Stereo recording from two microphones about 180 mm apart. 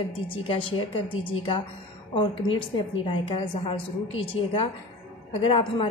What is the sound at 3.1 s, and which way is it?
A woman's voice, 30° left (ahead or behind).